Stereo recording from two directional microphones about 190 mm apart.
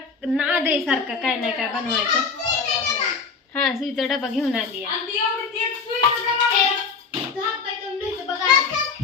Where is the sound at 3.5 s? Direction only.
Centre (ahead or behind).